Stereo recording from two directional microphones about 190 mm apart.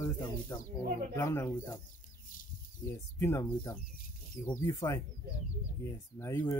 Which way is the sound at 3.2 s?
15° left (ahead or behind).